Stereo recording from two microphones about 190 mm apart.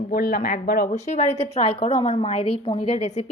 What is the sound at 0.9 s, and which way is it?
A woman's voice, 35° left (ahead or behind).